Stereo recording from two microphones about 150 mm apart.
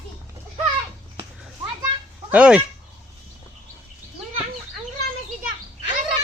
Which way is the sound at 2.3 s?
10° right (ahead or behind).